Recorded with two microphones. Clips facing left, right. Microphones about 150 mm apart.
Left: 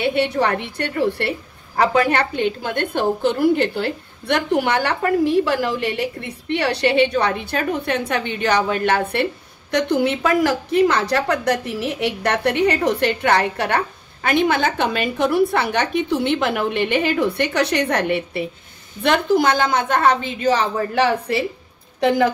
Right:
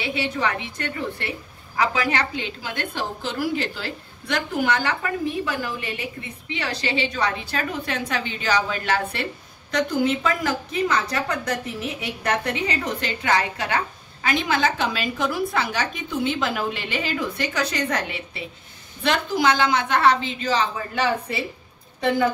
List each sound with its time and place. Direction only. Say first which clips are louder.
0.0 s a woman's voice: left 7 dB; 60° left (ahead or behind)